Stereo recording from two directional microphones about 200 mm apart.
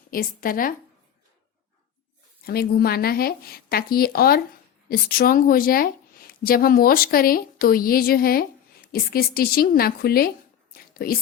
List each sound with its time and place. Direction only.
0.1 s a woman's voice: 45° left (ahead or behind)
2.4 s a woman's voice: 50° left (ahead or behind)